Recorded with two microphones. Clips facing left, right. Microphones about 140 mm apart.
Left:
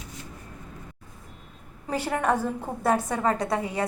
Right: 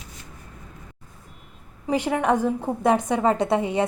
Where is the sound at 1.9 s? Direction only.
10° right (ahead or behind).